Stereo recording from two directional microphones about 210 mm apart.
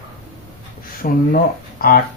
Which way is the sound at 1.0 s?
40° left (ahead or behind).